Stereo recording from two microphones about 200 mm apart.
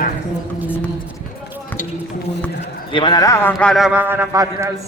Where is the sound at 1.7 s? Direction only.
10° left (ahead or behind).